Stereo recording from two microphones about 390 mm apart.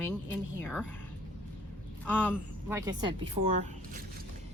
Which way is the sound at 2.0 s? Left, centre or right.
Centre.